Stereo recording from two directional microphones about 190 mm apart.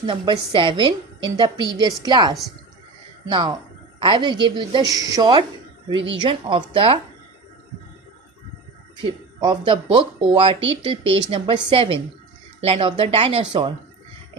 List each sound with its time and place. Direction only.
0.0 s a woman's voice: 25° right (ahead or behind)
9.0 s a woman's voice: 25° right (ahead or behind)